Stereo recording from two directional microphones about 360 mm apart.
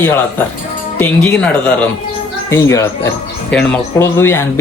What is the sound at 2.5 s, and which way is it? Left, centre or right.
Speech, centre.